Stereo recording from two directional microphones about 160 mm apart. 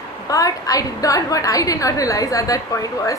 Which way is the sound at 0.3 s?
20° left (ahead or behind).